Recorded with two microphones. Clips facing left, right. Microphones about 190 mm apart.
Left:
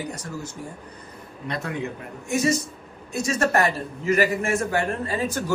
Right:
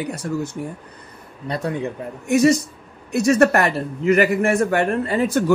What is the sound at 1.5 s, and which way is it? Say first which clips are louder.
Speech: right 6 dB; 35° right (ahead or behind).